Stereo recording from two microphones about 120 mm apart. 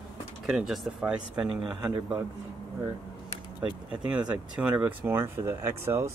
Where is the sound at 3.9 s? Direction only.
10° right (ahead or behind).